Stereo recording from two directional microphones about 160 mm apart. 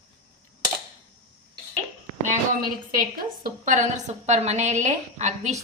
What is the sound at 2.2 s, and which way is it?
A woman's voice, 55° right (ahead or behind).